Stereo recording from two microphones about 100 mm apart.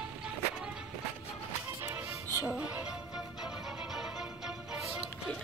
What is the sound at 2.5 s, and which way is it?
Music, 5° right (ahead or behind).